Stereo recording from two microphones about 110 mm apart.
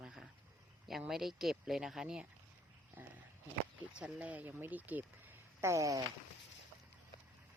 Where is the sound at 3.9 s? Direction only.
10° right (ahead or behind).